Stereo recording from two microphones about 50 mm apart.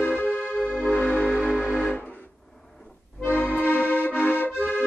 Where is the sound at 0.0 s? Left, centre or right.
Left.